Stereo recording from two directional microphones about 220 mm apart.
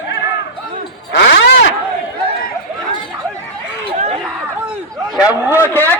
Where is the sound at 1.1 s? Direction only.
55° left (ahead or behind).